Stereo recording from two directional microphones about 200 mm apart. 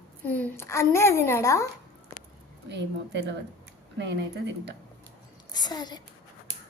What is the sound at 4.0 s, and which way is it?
Speech, 60° right (ahead or behind).